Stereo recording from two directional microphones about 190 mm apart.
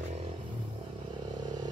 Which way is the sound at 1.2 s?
20° right (ahead or behind).